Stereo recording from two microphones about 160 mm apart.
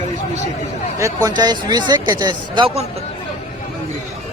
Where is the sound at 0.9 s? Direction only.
20° right (ahead or behind).